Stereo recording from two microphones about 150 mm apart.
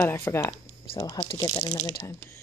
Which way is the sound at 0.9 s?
25° left (ahead or behind).